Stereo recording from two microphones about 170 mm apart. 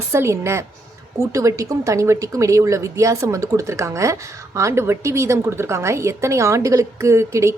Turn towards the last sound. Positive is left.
turn(degrees=-15)  # may be behind; listen again after turning